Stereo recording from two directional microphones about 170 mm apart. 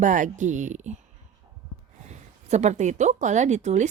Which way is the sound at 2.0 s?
40° right (ahead or behind).